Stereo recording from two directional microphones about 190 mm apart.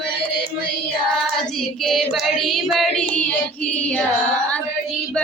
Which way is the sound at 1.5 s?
Centre (ahead or behind).